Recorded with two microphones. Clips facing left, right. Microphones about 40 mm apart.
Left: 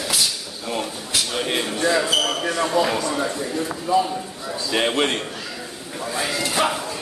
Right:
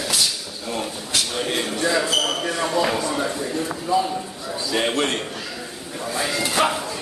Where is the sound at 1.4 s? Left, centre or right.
Centre.